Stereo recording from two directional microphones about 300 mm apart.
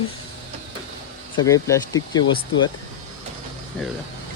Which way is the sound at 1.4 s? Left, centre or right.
Centre.